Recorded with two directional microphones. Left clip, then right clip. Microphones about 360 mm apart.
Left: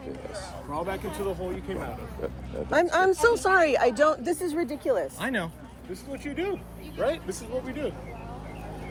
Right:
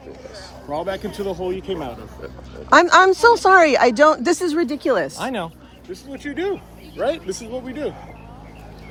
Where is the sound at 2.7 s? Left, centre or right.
Right.